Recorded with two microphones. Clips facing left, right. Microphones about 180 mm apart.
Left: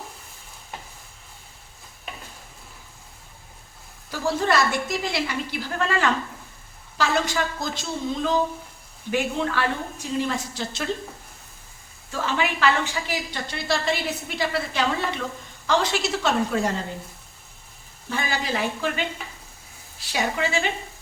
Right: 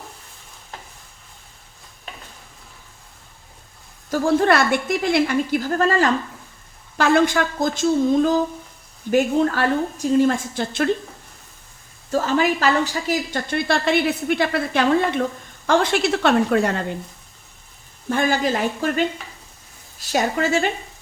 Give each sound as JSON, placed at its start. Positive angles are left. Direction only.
{"t": 4.1, "sound": "a woman's voice", "side_deg": -55}
{"t": 6.9, "sound": "a woman's voice", "side_deg": -55}
{"t": 12.1, "sound": "a woman's voice", "side_deg": -40}
{"t": 18.1, "sound": "a woman's voice", "side_deg": -50}